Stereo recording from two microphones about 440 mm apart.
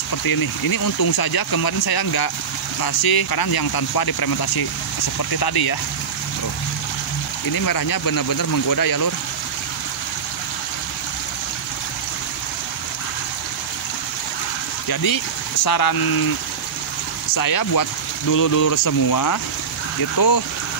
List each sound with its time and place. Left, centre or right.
0.2 s speech: left
7.5 s speech: left
14.9 s speech: left
17.3 s speech: left